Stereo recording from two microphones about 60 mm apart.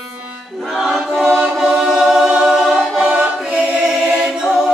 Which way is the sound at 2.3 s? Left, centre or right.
Centre.